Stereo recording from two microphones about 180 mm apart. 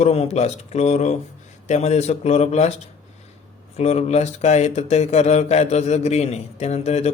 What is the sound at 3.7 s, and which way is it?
Speech, 40° left (ahead or behind).